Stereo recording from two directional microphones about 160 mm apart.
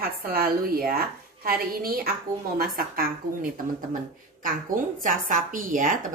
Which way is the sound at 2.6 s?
65° right (ahead or behind).